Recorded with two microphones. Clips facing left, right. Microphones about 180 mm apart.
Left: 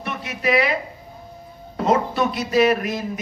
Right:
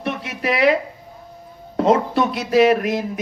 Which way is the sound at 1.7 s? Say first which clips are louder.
Right 3 dB; 85° right.